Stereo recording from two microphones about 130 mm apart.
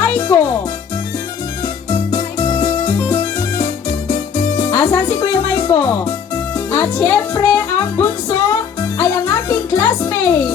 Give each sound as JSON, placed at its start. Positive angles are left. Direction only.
{"t": 0.0, "sound": "music", "side_deg": 15}
{"t": 1.6, "sound": "music", "side_deg": 15}